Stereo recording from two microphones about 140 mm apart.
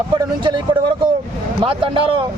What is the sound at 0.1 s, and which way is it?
Speech, 35° right (ahead or behind).